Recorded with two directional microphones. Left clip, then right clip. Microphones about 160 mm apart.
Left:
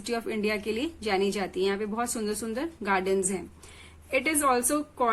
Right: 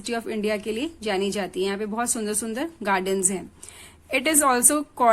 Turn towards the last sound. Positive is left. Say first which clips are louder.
# right 6 dB
turn(degrees=-45)  # may be behind; listen again after turning